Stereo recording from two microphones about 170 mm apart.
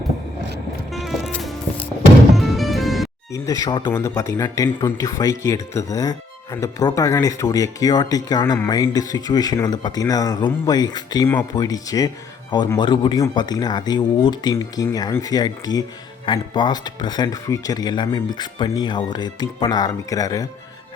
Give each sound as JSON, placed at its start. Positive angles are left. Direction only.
{"t": 0.9, "sound": "music", "side_deg": 0}
{"t": 3.3, "sound": "speech", "side_deg": 20}
{"t": 11.3, "sound": "speech", "side_deg": 10}